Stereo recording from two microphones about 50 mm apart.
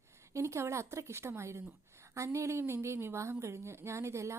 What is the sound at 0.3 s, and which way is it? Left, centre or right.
A woman's voice, right.